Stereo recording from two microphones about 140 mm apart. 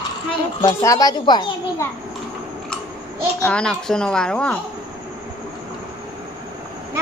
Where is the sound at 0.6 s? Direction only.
25° left (ahead or behind).